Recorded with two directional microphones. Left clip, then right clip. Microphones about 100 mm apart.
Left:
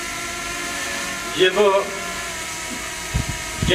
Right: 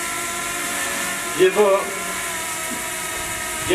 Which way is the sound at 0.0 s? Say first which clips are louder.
Right 2 dB; 20° right (ahead or behind).